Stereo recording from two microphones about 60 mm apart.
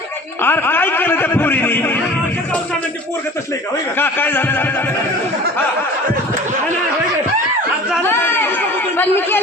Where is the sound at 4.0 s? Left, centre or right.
Left.